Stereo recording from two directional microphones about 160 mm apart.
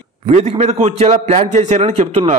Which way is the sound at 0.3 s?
45° right (ahead or behind).